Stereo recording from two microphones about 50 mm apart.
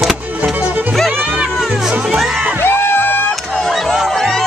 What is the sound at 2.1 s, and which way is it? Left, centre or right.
Music, centre.